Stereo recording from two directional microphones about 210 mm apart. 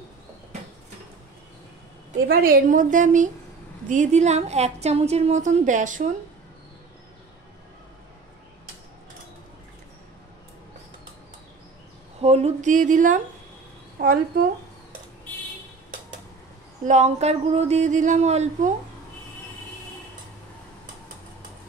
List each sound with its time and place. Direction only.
2.2 s a woman's voice: 45° right (ahead or behind)
12.2 s a woman's voice: 30° right (ahead or behind)
16.8 s a woman's voice: 35° right (ahead or behind)